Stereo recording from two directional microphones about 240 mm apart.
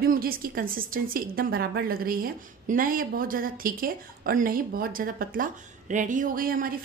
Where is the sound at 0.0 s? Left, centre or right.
Right.